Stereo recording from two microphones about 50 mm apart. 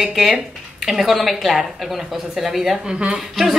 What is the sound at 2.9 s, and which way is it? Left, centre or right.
Speech, centre.